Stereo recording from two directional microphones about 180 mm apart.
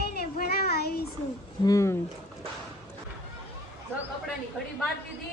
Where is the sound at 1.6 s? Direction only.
15° left (ahead or behind).